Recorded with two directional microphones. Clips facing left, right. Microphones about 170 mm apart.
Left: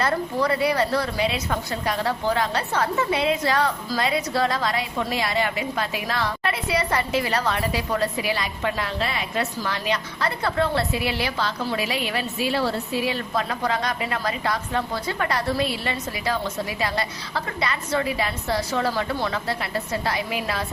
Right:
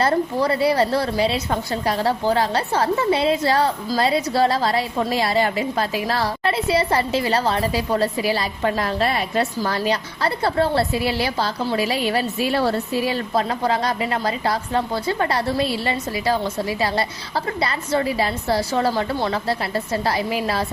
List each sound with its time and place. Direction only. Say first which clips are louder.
0.0 s a woman's voice: right 4 dB; 30° right (ahead or behind)